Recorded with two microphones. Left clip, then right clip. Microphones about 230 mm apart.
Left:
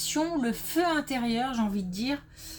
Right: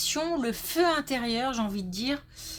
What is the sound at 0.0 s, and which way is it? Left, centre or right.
Speech, right.